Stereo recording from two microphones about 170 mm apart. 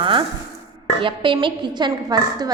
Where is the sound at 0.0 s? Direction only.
30° right (ahead or behind).